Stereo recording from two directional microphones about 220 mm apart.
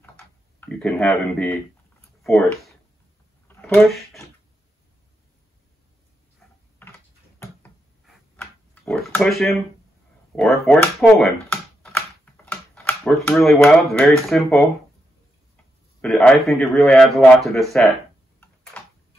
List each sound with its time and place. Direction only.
0.6 s speech: 5° left (ahead or behind)
3.4 s a sound: 10° left (ahead or behind)
7.6 s tick-tock: 5° left (ahead or behind)
10.3 s a man's voice: centre (ahead or behind)